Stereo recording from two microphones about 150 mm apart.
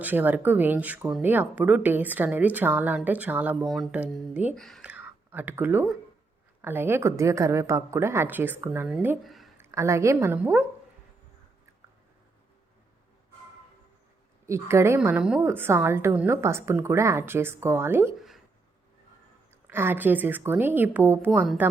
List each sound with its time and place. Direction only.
0.0 s a woman's voice: 10° right (ahead or behind)
3.6 s a woman's voice: centre (ahead or behind)
4.9 s whispering: 10° right (ahead or behind)
6.6 s a woman's voice: 15° right (ahead or behind)
9.2 s a sound: centre (ahead or behind)
9.6 s a woman's voice: 20° right (ahead or behind)
14.4 s a woman's voice: 20° right (ahead or behind)
18.2 s a sound: centre (ahead or behind)
19.6 s a woman's voice: 15° right (ahead or behind)